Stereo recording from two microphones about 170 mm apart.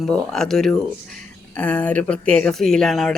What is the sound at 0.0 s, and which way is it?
Speech, 5° left (ahead or behind).